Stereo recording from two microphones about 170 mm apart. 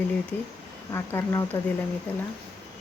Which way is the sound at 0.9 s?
15° left (ahead or behind).